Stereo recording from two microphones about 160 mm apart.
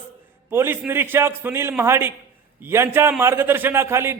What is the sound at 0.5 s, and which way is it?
A man's voice, 15° right (ahead or behind).